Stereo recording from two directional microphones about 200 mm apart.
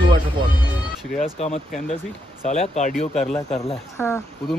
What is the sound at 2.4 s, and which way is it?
Speech, 30° left (ahead or behind).